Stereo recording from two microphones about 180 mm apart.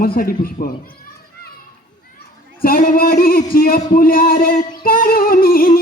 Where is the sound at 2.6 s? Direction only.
50° left (ahead or behind).